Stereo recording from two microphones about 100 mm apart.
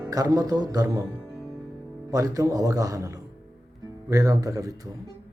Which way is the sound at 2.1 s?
35° right (ahead or behind).